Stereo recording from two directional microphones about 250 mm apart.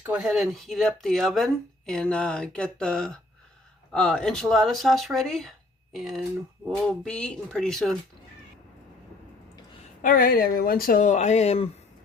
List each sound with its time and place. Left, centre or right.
0.1 s speech: centre
10.0 s speech: left